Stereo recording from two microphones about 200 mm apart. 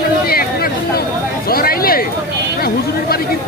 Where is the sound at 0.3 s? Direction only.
50° left (ahead or behind).